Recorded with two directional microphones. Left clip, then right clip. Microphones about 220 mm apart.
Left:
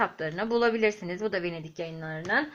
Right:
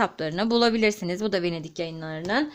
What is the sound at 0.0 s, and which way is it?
Speech, 50° right (ahead or behind).